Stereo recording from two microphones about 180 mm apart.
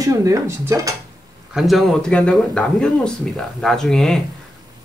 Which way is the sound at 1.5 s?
Centre (ahead or behind).